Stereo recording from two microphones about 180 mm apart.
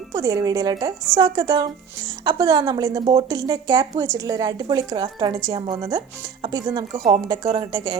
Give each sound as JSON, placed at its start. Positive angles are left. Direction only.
{"t": 0.1, "sound": "speech", "side_deg": -20}
{"t": 6.9, "sound": "a woman's voice", "side_deg": -45}
{"t": 7.5, "sound": "speech", "side_deg": -25}